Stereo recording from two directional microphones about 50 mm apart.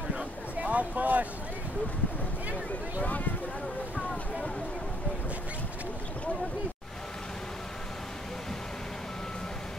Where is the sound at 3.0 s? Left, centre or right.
Left.